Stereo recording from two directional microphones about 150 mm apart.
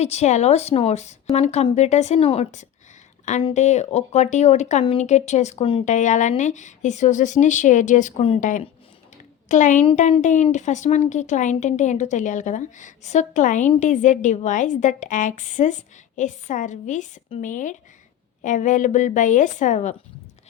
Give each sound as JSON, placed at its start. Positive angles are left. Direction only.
{"t": 0.0, "sound": "a woman's voice", "side_deg": 45}